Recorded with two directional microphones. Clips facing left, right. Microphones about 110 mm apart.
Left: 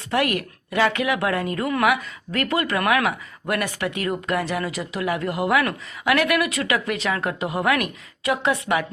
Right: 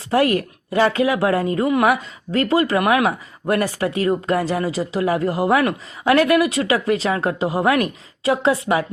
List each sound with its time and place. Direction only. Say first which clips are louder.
0.1 s speech: right 5 dB; 30° right (ahead or behind)